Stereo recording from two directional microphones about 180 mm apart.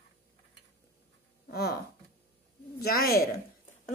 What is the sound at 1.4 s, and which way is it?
Speech, 60° left (ahead or behind).